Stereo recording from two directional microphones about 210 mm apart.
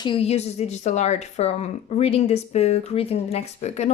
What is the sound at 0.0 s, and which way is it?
A woman's voice, 25° left (ahead or behind).